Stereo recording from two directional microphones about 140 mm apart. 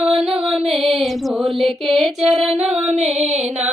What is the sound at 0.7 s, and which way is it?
Music, centre (ahead or behind).